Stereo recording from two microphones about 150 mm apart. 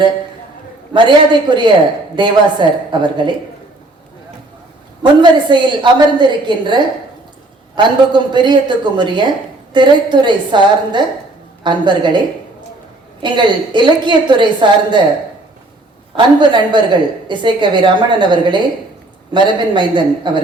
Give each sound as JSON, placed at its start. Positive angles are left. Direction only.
{"t": 0.9, "sound": "a woman's voice", "side_deg": -30}
{"t": 5.2, "sound": "a woman's voice", "side_deg": -30}
{"t": 13.2, "sound": "a woman's voice", "side_deg": -30}
{"t": 16.1, "sound": "a woman's voice", "side_deg": -30}